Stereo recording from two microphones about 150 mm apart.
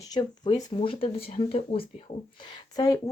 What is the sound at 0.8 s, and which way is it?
Speech, 40° left (ahead or behind).